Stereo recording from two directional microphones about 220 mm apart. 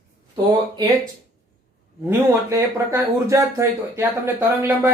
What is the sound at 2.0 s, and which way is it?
Speech, 10° right (ahead or behind).